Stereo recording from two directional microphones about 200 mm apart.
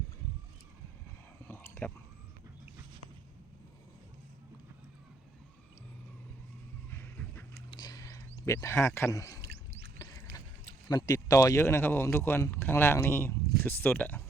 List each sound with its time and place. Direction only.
1.5 s whispering: 10° left (ahead or behind)
6.9 s a sound: 10° left (ahead or behind)
10.8 s speech: 20° left (ahead or behind)